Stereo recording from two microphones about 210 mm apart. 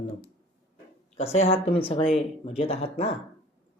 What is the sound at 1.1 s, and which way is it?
Speech, 30° left (ahead or behind).